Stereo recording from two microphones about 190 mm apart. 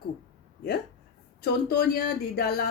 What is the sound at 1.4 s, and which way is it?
Speech, 60° left (ahead or behind).